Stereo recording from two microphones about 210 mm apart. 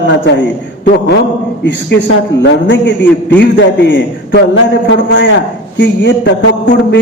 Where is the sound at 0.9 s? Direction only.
55° left (ahead or behind).